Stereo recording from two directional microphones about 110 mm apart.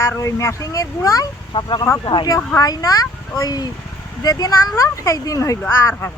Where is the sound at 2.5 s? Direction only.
35° left (ahead or behind).